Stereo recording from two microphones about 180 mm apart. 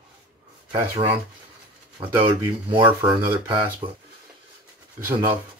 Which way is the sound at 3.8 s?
30° right (ahead or behind).